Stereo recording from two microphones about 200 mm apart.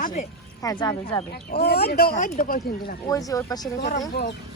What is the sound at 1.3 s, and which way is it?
Speech, 50° left (ahead or behind).